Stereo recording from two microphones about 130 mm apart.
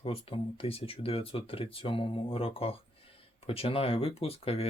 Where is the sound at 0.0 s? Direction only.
45° left (ahead or behind).